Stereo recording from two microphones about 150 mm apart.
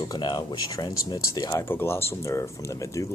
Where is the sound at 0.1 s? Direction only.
30° left (ahead or behind).